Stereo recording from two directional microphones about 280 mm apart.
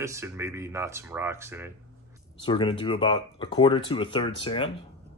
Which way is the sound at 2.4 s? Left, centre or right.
Centre.